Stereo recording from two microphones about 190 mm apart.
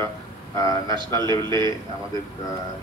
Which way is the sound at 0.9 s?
25° right (ahead or behind).